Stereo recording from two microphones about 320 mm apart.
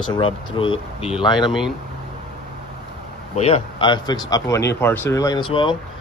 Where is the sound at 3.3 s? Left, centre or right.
Centre.